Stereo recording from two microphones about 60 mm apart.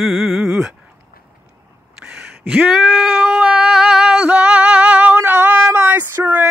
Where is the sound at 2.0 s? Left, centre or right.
Centre.